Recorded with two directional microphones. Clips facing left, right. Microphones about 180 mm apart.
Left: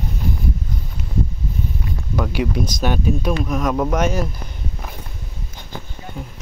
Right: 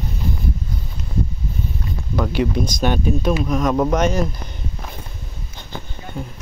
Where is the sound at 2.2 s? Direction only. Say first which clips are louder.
Right 2 dB; 5° left (ahead or behind).